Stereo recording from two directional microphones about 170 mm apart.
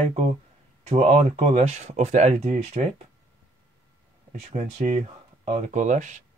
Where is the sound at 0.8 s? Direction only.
40° right (ahead or behind).